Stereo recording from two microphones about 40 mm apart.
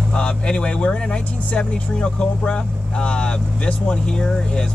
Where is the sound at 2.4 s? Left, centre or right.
Left.